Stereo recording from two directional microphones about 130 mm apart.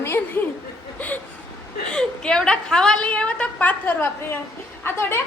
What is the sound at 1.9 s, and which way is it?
A woman's voice, 5° left (ahead or behind).